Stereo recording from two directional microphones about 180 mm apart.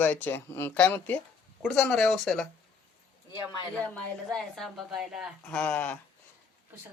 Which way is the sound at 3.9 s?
5° left (ahead or behind).